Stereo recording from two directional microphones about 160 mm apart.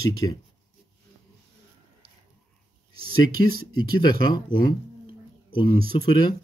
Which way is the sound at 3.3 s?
65° right (ahead or behind).